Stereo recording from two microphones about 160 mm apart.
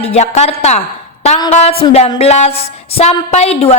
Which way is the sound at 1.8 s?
35° left (ahead or behind).